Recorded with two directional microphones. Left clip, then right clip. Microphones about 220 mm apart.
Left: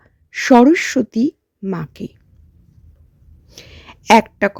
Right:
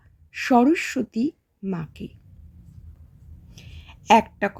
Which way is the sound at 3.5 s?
40° left (ahead or behind).